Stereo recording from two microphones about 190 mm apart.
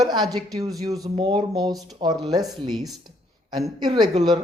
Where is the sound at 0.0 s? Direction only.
20° right (ahead or behind).